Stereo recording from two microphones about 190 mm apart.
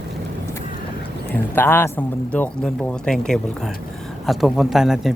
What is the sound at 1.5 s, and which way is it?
Speech, 10° left (ahead or behind).